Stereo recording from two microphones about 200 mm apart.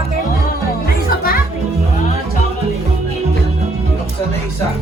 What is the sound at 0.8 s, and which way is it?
Music, 50° left (ahead or behind).